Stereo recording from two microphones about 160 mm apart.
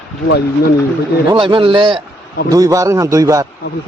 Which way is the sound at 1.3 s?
30° right (ahead or behind).